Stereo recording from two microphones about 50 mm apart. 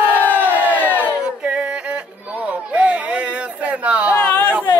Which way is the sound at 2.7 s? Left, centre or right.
Right.